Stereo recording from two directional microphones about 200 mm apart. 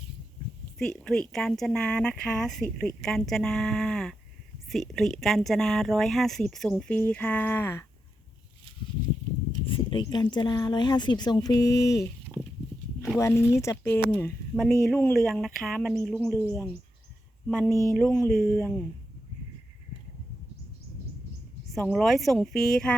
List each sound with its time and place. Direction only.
0.8 s speech: 5° left (ahead or behind)
9.6 s speech: 25° left (ahead or behind)
13.1 s speech: 15° left (ahead or behind)
17.9 s speech: 5° left (ahead or behind)
18.3 s speech: 50° left (ahead or behind)
21.8 s speech: centre (ahead or behind)